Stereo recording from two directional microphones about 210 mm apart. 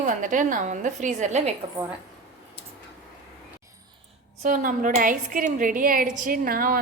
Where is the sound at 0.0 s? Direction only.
40° right (ahead or behind).